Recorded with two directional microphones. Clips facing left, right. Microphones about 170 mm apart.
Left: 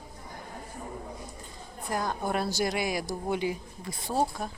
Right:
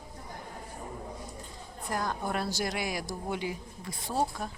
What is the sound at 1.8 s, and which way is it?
A woman's voice, 10° left (ahead or behind).